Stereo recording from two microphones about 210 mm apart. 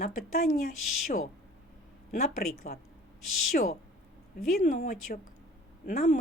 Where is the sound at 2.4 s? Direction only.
45° left (ahead or behind).